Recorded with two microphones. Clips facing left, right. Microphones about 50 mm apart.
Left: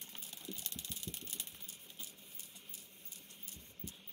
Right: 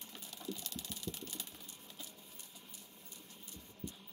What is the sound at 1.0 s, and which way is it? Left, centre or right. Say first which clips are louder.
Engine: right 4 dB; left.